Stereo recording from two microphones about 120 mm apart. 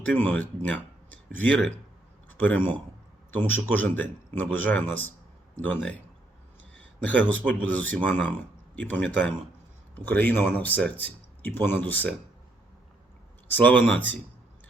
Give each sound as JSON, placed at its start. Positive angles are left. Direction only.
{"t": 0.1, "sound": "speech", "side_deg": 15}
{"t": 7.0, "sound": "speech", "side_deg": 15}
{"t": 13.5, "sound": "speech", "side_deg": 15}